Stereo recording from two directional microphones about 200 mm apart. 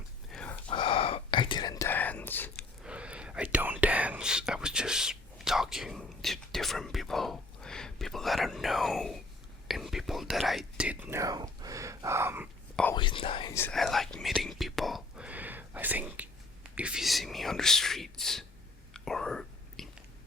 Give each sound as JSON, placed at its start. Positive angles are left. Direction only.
{"t": 0.3, "sound": "a sound", "side_deg": 5}
{"t": 0.7, "sound": "whispering", "side_deg": 25}
{"t": 2.8, "sound": "whispering", "side_deg": -5}
{"t": 12.9, "sound": "whispering", "side_deg": 25}
{"t": 13.7, "sound": "whispering", "side_deg": 0}